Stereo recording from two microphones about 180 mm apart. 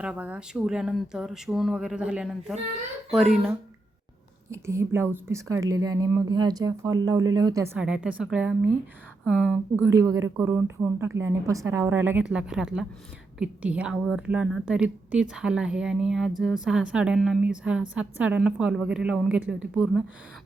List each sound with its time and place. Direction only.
0.0 s a woman's voice: 5° right (ahead or behind)
4.5 s a woman's voice: 15° right (ahead or behind)
7.8 s a woman's voice: 5° right (ahead or behind)
9.8 s a woman's voice: 20° right (ahead or behind)